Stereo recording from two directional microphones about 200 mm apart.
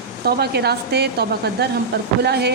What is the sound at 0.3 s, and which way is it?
A woman's voice, 55° right (ahead or behind).